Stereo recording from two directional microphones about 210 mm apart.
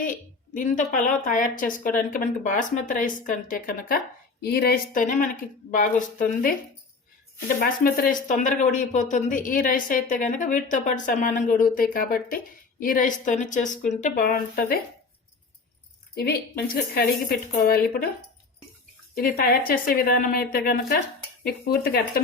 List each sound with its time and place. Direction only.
0.0 s a woman's voice: 40° left (ahead or behind)
16.2 s speech: 45° left (ahead or behind)
19.1 s speech: 45° left (ahead or behind)